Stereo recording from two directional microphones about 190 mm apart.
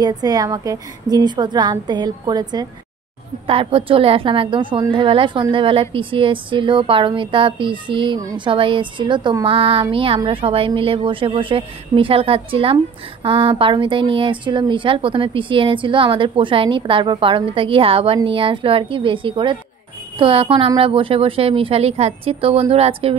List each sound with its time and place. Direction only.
0.0 s speech: 20° right (ahead or behind)